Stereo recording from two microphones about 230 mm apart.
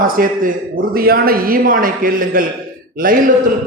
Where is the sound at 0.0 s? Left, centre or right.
Right.